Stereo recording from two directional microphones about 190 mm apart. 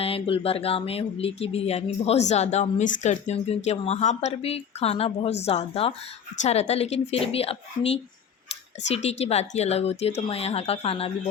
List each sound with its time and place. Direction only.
0.0 s speech: 30° left (ahead or behind)